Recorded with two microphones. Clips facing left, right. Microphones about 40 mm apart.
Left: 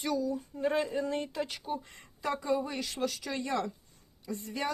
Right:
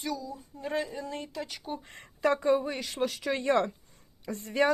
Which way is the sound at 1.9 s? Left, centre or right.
Right.